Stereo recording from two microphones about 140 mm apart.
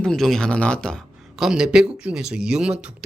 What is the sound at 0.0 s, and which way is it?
Speech, 5° left (ahead or behind).